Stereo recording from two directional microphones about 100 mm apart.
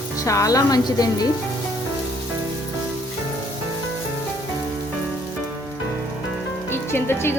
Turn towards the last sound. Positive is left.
turn(degrees=25)  # may be behind; listen again after turning